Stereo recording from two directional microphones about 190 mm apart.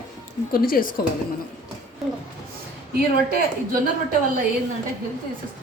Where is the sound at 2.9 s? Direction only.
55° right (ahead or behind).